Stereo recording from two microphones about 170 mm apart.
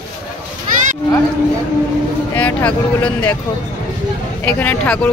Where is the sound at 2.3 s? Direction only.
10° left (ahead or behind).